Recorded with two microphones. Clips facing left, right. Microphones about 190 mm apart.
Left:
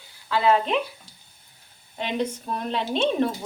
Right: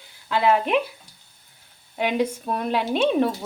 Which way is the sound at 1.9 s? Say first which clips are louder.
Right 4 dB; 10° right (ahead or behind).